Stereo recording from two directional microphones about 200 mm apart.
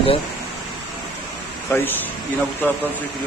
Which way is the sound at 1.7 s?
10° left (ahead or behind).